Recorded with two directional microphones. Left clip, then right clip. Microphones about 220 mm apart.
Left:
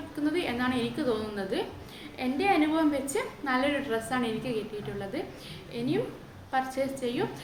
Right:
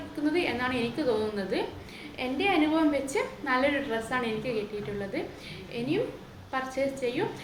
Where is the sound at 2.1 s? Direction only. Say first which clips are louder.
Left 1 dB; 5° left (ahead or behind).